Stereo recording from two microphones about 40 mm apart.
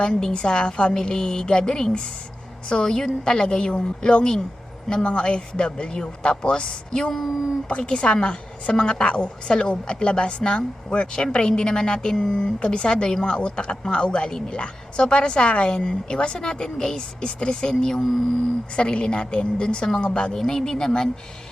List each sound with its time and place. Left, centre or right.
0.2 s a woman's voice: left